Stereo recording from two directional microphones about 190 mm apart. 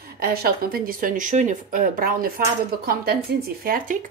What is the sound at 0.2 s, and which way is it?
Speech, 50° right (ahead or behind).